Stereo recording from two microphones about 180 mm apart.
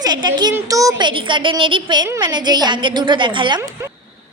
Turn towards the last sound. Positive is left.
turn(degrees=-20)  # may be behind; listen again after turning